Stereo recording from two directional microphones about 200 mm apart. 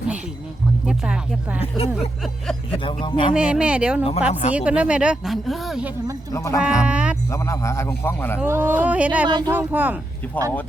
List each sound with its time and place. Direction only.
0.9 s music: 5° right (ahead or behind)
1.9 s speech: centre (ahead or behind)
2.7 s speech: 25° left (ahead or behind)
3.3 s speech: 5° right (ahead or behind)
4.3 s speech: 35° left (ahead or behind)
4.5 s speech: 5° right (ahead or behind)
6.3 s a man's voice: 15° left (ahead or behind)
6.6 s speech: 5° right (ahead or behind)
7.3 s a man's voice: 15° left (ahead or behind)
8.4 s speech: 10° right (ahead or behind)
10.4 s a man's voice: 10° left (ahead or behind)